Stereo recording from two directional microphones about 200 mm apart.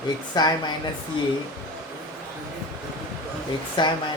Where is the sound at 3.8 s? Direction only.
25° left (ahead or behind).